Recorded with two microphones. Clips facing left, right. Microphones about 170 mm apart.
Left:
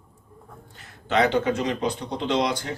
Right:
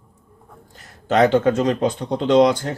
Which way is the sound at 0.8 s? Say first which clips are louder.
Right 6 dB; 45° right (ahead or behind).